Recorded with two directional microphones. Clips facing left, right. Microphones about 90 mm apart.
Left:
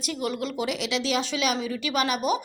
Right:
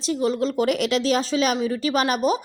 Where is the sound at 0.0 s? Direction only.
30° right (ahead or behind).